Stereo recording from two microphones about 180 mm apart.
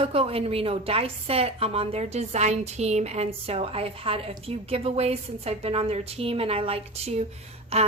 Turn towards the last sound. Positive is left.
turn(degrees=-35)  # may be behind; listen again after turning